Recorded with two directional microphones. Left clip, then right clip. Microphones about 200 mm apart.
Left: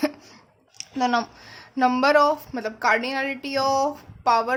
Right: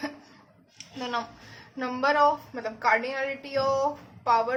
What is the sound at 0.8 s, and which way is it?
A woman's voice, 55° left (ahead or behind).